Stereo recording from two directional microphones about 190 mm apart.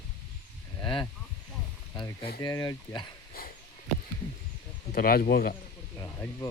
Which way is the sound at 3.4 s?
50° left (ahead or behind).